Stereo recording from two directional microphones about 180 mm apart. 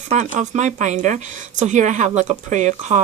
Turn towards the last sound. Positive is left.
turn(degrees=-40)  # may be behind; listen again after turning